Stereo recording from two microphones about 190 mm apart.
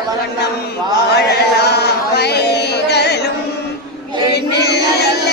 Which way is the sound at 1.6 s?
60° left (ahead or behind).